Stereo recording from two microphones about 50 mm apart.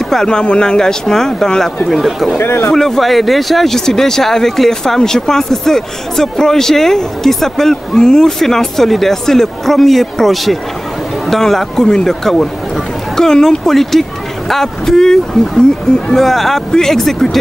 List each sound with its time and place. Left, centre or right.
0.1 s speech: centre
2.0 s speech: centre
2.3 s speech: left
2.7 s speech: centre